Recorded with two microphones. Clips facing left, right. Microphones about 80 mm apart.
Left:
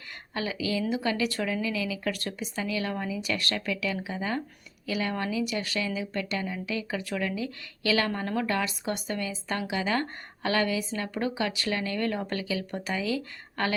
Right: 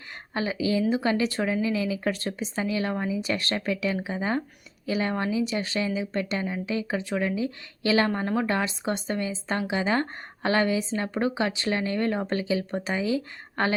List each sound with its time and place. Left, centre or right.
0.3 s speech: right